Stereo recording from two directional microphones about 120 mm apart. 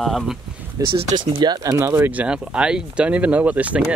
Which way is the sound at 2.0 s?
10° right (ahead or behind).